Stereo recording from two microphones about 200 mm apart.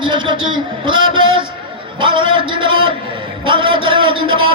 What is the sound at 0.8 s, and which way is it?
A man's voice, 25° right (ahead or behind).